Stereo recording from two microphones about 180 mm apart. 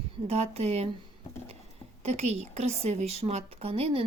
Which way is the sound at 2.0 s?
40° right (ahead or behind).